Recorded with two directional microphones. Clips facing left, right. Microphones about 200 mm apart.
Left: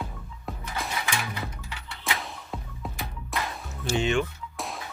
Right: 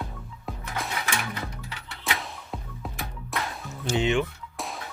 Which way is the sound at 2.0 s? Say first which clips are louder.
Right 1 dB; centre (ahead or behind).